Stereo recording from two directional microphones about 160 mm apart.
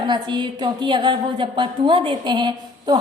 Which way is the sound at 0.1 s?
30° right (ahead or behind).